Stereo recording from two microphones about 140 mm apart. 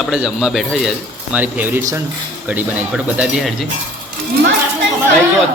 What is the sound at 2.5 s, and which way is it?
A man's voice, 10° right (ahead or behind).